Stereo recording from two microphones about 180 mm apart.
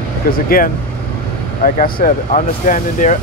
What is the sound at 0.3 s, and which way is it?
Speech, 55° left (ahead or behind).